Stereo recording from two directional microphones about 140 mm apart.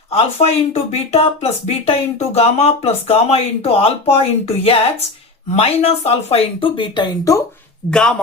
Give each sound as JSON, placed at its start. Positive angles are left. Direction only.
{"t": 0.1, "sound": "speech", "side_deg": 50}
{"t": 7.9, "sound": "speech", "side_deg": 5}